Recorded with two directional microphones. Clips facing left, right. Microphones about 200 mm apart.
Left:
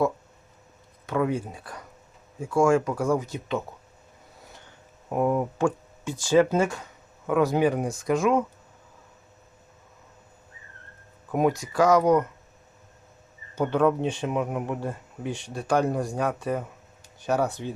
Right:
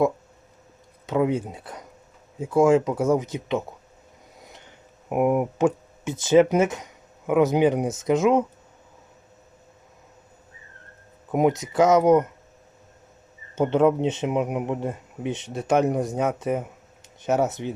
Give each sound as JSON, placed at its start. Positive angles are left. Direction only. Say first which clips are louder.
{"t": 1.0, "sound": "speech", "louder": "right 3 dB", "side_deg": -20}
{"t": 11.3, "sound": "speech", "louder": "right 3 dB", "side_deg": -20}
{"t": 13.6, "sound": "speech", "louder": "right 3 dB", "side_deg": -20}